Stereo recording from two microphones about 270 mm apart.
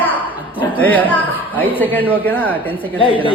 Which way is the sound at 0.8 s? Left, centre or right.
Centre.